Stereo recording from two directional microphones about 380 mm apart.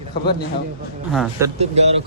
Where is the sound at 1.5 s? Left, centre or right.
Centre.